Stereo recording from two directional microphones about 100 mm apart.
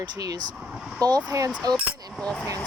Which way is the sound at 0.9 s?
40° right (ahead or behind).